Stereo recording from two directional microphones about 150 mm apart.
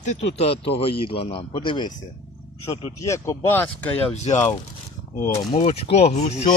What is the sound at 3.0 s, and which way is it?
Speech, 20° left (ahead or behind).